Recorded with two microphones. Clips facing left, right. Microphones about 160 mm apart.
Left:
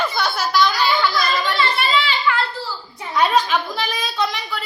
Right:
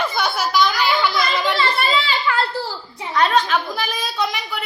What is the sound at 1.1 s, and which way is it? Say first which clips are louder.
Speech: right 1 dB; 20° right (ahead or behind).